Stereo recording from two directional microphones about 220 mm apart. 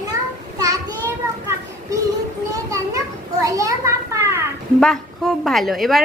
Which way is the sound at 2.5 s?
15° right (ahead or behind).